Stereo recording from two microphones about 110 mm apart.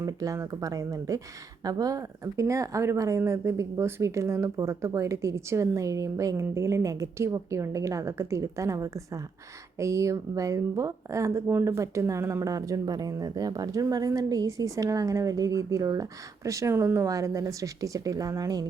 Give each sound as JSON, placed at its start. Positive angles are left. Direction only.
{"t": 0.0, "sound": "a woman's voice", "side_deg": -30}